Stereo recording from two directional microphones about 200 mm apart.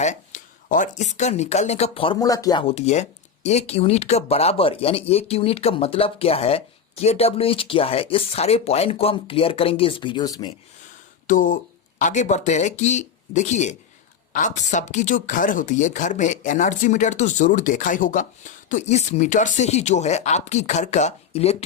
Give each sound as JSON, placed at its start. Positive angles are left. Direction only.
{"t": 0.0, "sound": "speech", "side_deg": 40}
{"t": 11.3, "sound": "speech", "side_deg": 40}